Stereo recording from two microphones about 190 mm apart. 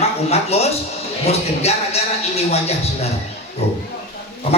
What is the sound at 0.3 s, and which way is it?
A man's voice, 35° left (ahead or behind).